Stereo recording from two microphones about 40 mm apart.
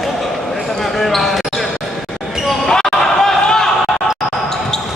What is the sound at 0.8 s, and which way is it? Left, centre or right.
Basketball bounce, centre.